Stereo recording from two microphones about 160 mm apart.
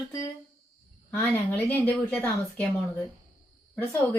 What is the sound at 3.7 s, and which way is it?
Speech, 10° left (ahead or behind).